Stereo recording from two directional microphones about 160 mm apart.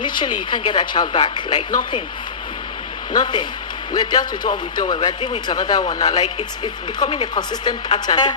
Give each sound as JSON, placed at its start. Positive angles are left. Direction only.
{"t": 0.2, "sound": "a woman's voice", "side_deg": 30}
{"t": 3.1, "sound": "a woman's voice", "side_deg": 25}